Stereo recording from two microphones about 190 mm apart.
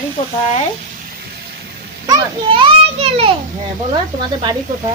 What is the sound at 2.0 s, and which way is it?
Children playing, 20° right (ahead or behind).